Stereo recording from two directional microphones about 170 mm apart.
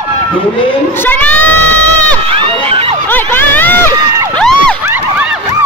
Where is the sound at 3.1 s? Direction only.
10° left (ahead or behind).